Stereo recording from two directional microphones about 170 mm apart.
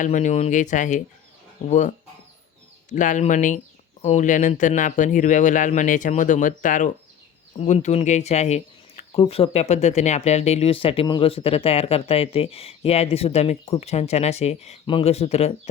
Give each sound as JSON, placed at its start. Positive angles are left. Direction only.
{"t": 0.0, "sound": "speech", "side_deg": 45}